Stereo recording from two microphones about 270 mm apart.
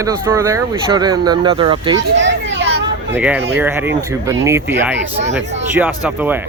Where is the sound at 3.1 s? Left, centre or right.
Centre.